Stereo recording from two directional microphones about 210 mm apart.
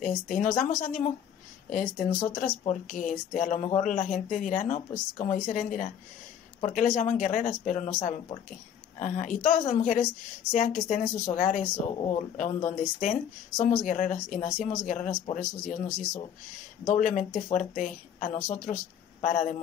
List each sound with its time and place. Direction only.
0.0 s speech: 40° left (ahead or behind)